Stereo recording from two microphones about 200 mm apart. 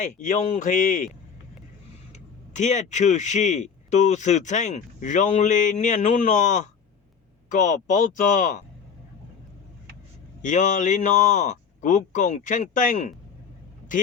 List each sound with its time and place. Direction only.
0.0 s speech: 40° left (ahead or behind)
2.6 s speech: 35° left (ahead or behind)
10.4 s speech: 40° left (ahead or behind)